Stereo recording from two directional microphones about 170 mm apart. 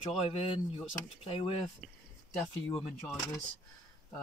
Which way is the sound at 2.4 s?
5° left (ahead or behind).